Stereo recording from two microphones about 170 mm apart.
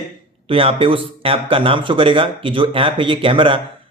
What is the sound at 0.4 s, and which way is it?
A man's voice, 35° right (ahead or behind).